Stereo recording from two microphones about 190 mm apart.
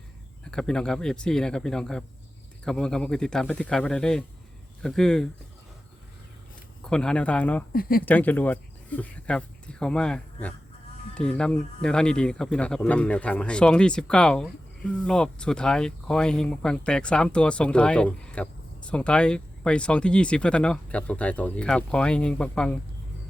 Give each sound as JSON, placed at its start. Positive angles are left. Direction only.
{"t": 0.5, "sound": "speech", "side_deg": 5}
{"t": 6.8, "sound": "speech", "side_deg": 5}
{"t": 7.7, "sound": "speech", "side_deg": 50}
{"t": 8.0, "sound": "speech", "side_deg": 10}